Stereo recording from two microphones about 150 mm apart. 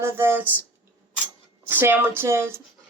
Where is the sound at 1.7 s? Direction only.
15° right (ahead or behind).